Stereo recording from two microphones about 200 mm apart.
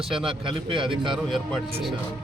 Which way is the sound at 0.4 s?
25° right (ahead or behind).